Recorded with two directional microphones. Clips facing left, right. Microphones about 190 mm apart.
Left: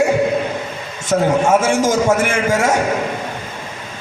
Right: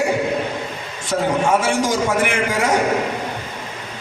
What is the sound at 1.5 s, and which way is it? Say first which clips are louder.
A man's voice: left 4 dB; 45° left (ahead or behind).